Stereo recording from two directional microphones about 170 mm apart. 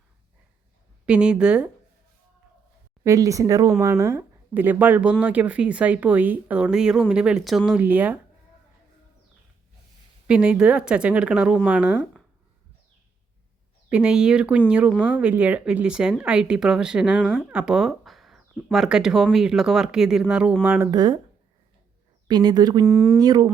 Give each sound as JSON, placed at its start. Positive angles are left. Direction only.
{"t": 1.0, "sound": "speech", "side_deg": -5}
{"t": 3.0, "sound": "speech", "side_deg": -20}
{"t": 10.2, "sound": "speech", "side_deg": -5}
{"t": 13.9, "sound": "speech", "side_deg": -5}
{"t": 20.9, "sound": "speech", "side_deg": -25}
{"t": 22.3, "sound": "speech", "side_deg": -25}
{"t": 22.9, "sound": "speech", "side_deg": -5}
{"t": 23.1, "sound": "speech", "side_deg": -20}